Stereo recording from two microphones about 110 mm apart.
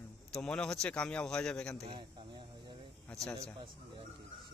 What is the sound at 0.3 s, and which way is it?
A man's voice, 10° left (ahead or behind).